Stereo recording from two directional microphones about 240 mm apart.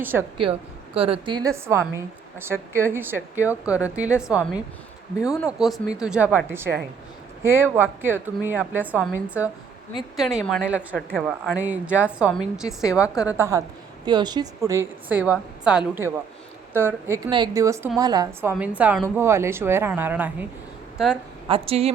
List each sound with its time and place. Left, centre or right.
0.0 s a woman's voice: centre
0.9 s a woman's voice: right; by 20.3 s centre
21.4 s speech: right